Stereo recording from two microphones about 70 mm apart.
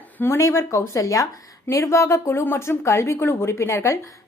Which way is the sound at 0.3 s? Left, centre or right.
Left.